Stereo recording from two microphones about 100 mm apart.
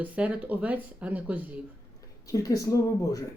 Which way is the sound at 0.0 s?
15° right (ahead or behind).